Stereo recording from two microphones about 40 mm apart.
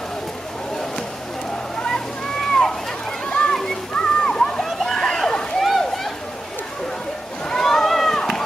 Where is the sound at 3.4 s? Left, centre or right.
Centre.